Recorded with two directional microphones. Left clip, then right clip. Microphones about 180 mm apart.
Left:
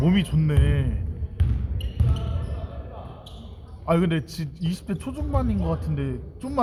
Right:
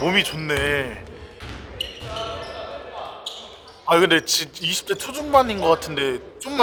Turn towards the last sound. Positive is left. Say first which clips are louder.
# right 7 dB
turn(degrees=-40)  # may be behind; listen again after turning